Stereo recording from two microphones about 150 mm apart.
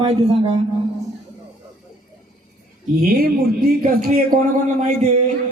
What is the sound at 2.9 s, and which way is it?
Speech, 85° right.